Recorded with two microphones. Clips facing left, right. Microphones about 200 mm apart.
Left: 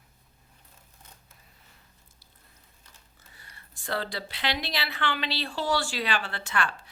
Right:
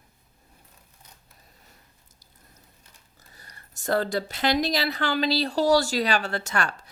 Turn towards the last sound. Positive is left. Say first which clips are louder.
# right 2 dB
turn(degrees=-40)  # may be behind; listen again after turning